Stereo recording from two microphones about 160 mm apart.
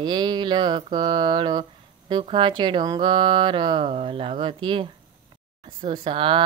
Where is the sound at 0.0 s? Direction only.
30° right (ahead or behind).